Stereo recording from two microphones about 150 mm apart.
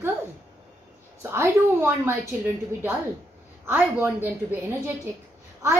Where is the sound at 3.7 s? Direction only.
15° right (ahead or behind).